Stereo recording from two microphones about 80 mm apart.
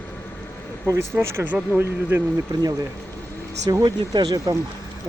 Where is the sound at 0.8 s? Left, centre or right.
Right.